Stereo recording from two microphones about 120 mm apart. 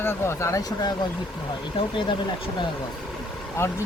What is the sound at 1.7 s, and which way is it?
Speech, 45° left (ahead or behind).